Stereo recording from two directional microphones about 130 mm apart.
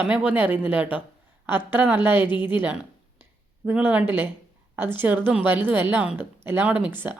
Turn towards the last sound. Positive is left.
turn(degrees=-15)  # may be behind; listen again after turning